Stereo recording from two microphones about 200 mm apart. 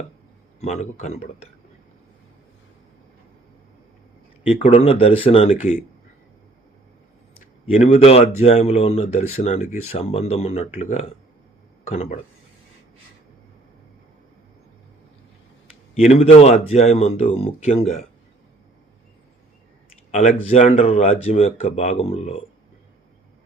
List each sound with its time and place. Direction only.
0.6 s speech: 35° left (ahead or behind)
4.4 s speech: 30° left (ahead or behind)
7.7 s speech: 30° left (ahead or behind)
16.0 s speech: 30° left (ahead or behind)
20.1 s speech: 35° left (ahead or behind)